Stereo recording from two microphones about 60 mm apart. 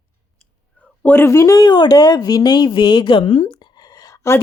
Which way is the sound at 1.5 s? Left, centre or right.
Left.